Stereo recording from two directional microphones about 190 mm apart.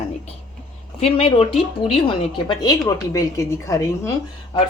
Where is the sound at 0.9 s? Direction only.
30° left (ahead or behind); by 4.1 s 15° left (ahead or behind).